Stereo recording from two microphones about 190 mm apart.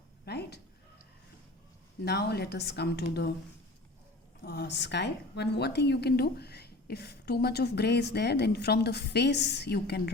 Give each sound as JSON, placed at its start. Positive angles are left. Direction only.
{"t": 0.3, "sound": "a sound", "side_deg": 60}
{"t": 2.0, "sound": "a woman's voice", "side_deg": 60}
{"t": 4.4, "sound": "a woman's voice", "side_deg": 60}